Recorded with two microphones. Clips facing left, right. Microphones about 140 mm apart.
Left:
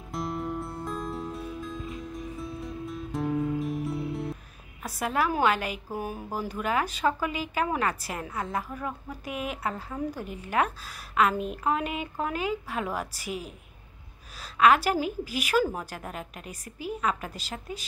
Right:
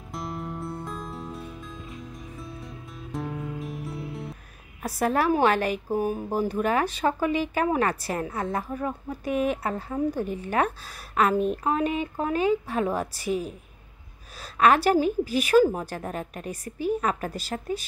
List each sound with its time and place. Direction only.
0.1 s music: centre (ahead or behind)
4.8 s a woman's voice: 40° right (ahead or behind)
14.6 s a woman's voice: 35° right (ahead or behind)
15.5 s a woman's voice: 25° right (ahead or behind)
16.0 s a woman's voice: 40° right (ahead or behind)